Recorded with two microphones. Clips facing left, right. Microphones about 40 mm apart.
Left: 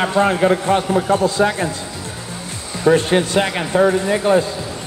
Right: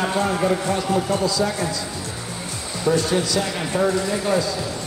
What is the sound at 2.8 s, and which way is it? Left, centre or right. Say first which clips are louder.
A man's voice: left 6 dB; left.